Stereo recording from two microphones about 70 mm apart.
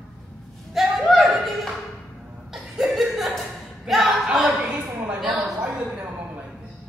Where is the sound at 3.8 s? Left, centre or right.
Centre.